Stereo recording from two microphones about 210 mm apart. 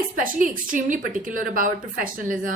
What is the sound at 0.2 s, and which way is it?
A woman's voice, 40° right (ahead or behind).